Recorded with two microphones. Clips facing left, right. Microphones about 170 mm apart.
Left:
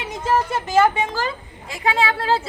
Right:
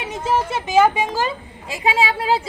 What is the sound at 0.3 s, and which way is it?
A woman's voice, 10° right (ahead or behind).